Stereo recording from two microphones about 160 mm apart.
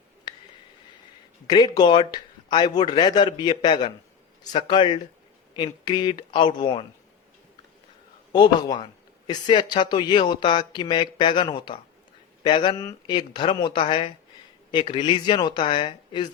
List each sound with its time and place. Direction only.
0.3 s a sound: 30° left (ahead or behind)
1.5 s speech: 25° left (ahead or behind)
8.3 s speech: 30° left (ahead or behind)